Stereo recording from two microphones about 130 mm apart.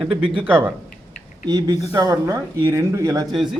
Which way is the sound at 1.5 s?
30° right (ahead or behind).